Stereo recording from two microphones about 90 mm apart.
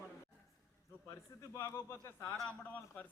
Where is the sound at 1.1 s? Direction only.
40° left (ahead or behind).